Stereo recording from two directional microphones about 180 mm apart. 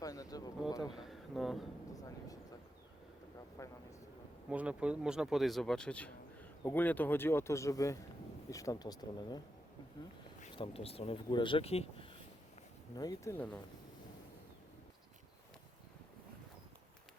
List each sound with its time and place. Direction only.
0.0 s a sound: 20° left (ahead or behind)
0.9 s speech: centre (ahead or behind)
2.0 s a sound: 20° left (ahead or behind)
3.6 s speech: 15° left (ahead or behind)
4.4 s speech: 5° right (ahead or behind); by 9.4 s 20° left (ahead or behind)
10.5 s speech: 30° left (ahead or behind)
13.0 s speech: 20° left (ahead or behind)